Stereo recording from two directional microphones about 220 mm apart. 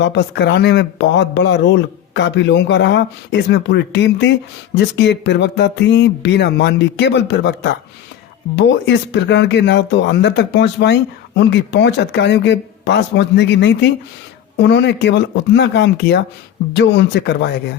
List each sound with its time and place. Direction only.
0.0 s speech: 55° left (ahead or behind)